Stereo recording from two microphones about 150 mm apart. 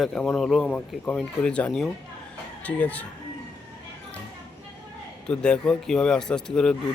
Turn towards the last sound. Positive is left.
turn(degrees=5)  # may be behind; listen again after turning